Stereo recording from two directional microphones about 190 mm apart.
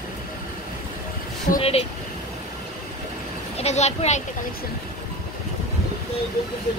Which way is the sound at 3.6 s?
35° left (ahead or behind).